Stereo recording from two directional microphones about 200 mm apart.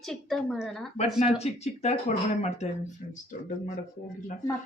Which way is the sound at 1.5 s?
35° left (ahead or behind).